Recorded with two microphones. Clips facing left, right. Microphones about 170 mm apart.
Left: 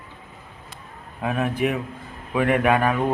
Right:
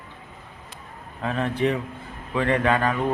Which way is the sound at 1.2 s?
10° left (ahead or behind).